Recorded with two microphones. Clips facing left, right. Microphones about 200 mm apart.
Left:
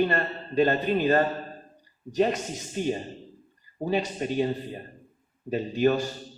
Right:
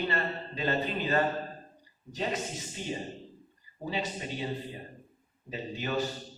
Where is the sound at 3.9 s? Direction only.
50° left (ahead or behind).